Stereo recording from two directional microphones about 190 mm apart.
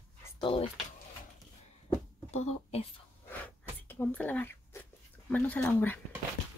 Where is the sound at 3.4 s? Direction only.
10° left (ahead or behind).